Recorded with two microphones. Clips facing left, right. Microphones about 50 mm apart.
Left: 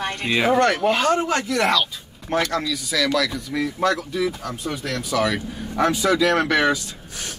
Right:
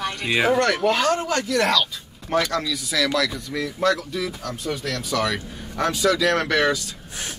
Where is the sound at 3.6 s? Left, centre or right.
Left.